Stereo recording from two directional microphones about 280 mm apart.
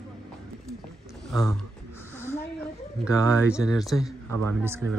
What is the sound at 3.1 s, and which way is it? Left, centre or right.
Speech, centre.